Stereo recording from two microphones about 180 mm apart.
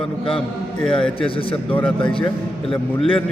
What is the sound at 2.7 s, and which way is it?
Speech, 30° left (ahead or behind).